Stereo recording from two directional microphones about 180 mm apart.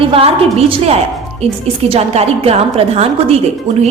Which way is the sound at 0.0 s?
30° right (ahead or behind).